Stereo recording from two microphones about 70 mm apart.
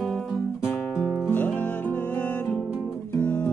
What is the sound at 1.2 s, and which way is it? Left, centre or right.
Music, left.